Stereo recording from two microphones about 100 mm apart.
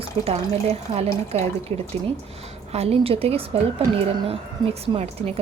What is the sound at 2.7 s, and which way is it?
Speech, 85° right.